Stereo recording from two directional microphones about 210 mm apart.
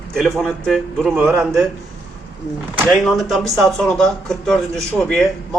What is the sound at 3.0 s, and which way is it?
A man's voice, centre (ahead or behind).